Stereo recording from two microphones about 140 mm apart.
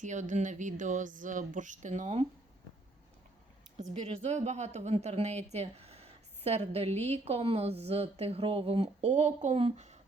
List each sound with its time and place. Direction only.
0.0 s a woman's voice: 60° right (ahead or behind)
4.0 s speech: 50° right (ahead or behind)